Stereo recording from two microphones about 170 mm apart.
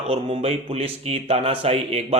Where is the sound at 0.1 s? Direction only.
35° right (ahead or behind).